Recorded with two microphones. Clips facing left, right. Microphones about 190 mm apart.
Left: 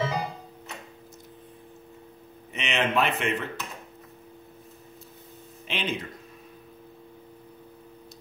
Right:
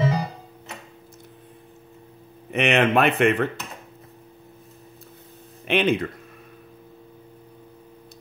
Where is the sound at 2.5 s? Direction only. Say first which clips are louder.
Right 8 dB; 60° right (ahead or behind).